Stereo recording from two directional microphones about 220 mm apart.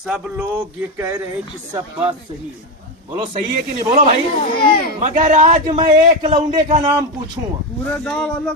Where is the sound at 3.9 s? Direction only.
40° right (ahead or behind).